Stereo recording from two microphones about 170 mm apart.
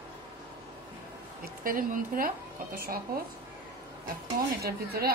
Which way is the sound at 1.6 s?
55° right (ahead or behind).